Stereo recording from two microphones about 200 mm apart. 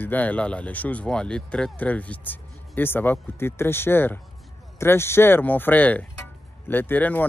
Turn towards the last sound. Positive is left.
turn(degrees=10)  # may be behind; listen again after turning